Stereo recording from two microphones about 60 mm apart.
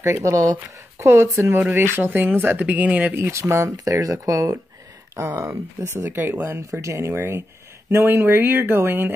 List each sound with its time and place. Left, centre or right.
0.0 s speech: right
0.9 s speech: right
2.0 s speech: right
3.2 s speech: right
3.7 s speech: right
6.1 s speech: right
6.7 s speech: right